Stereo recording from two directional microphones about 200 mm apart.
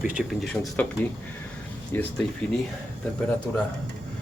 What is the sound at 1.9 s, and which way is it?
Speech, 10° left (ahead or behind).